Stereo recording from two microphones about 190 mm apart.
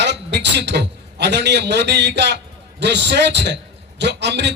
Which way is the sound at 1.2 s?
65° right (ahead or behind).